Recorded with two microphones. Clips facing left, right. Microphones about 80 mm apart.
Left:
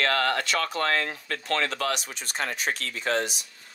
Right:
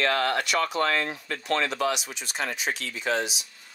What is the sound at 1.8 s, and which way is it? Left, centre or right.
Speech, left.